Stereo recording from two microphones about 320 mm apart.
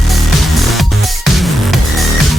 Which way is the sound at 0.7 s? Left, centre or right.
Centre.